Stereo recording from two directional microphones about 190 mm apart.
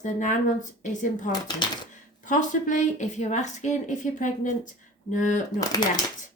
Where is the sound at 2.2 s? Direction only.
40° left (ahead or behind).